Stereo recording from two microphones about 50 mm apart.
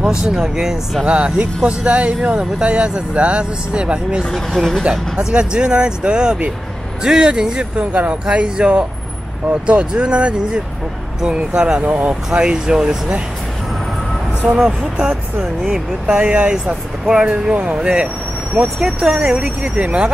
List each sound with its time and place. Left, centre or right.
0.0 s speech: centre
1.0 s speech: right
4.2 s speech: centre
5.1 s speech: centre
11.8 s speech: right
12.1 s speech: centre
15.0 s speech: centre